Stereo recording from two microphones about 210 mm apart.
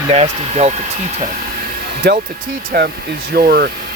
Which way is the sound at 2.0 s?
50° right (ahead or behind).